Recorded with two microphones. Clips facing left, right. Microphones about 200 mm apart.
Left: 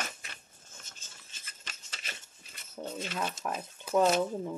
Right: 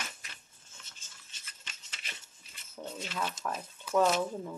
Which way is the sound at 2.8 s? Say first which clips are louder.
Left 3 dB; 25° left (ahead or behind).